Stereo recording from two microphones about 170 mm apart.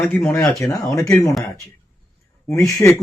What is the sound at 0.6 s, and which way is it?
Speech, 20° left (ahead or behind).